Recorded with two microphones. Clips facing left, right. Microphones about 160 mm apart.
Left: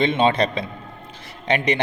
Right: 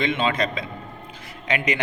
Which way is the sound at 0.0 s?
30° left (ahead or behind).